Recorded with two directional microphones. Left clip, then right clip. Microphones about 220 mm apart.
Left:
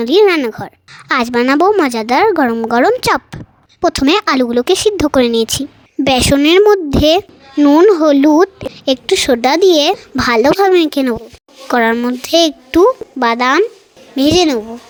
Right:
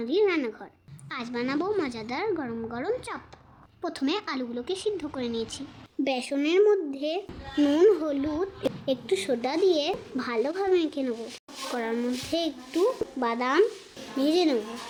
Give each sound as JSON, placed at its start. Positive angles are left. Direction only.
{"t": 0.0, "sound": "a woman's voice", "side_deg": 50}
{"t": 7.5, "sound": "a woman's voice", "side_deg": 35}